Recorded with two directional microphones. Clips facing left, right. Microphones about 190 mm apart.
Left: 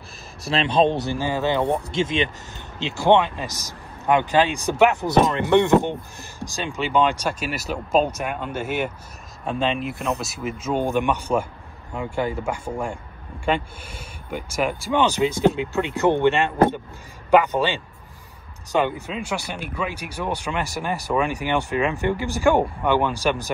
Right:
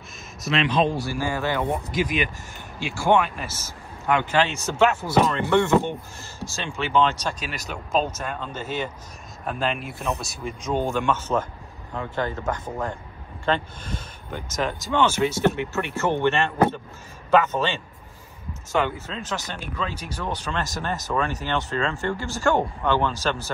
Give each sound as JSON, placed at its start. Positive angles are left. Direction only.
{"t": 0.4, "sound": "speech", "side_deg": 30}
{"t": 9.8, "sound": "speech", "side_deg": 0}